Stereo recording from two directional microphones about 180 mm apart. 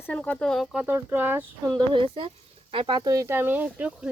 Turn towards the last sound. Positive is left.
turn(degrees=-5)  # may be behind; listen again after turning